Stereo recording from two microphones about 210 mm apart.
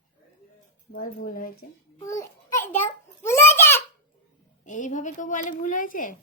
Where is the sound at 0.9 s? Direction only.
45° left (ahead or behind).